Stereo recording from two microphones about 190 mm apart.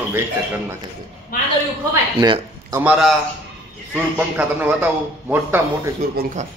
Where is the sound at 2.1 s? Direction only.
25° right (ahead or behind).